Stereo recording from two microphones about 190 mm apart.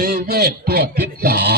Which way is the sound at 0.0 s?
50° right (ahead or behind).